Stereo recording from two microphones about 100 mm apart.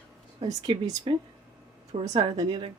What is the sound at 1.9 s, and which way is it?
Speech, 90° right.